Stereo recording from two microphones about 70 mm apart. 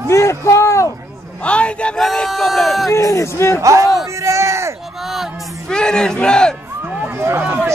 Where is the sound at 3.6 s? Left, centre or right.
Right.